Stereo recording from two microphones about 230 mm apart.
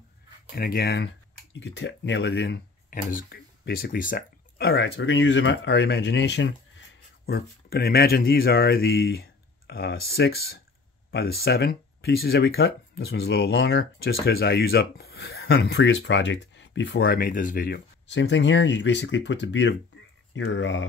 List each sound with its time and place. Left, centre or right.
0.6 s speech: left